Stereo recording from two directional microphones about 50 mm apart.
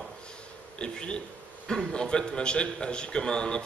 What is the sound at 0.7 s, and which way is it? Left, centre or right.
A man's voice, centre.